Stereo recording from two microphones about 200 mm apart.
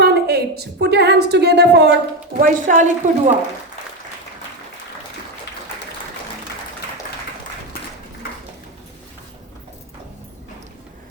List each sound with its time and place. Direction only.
0.0 s a woman's voice: 55° right (ahead or behind)
2.4 s a woman's voice: 40° right (ahead or behind)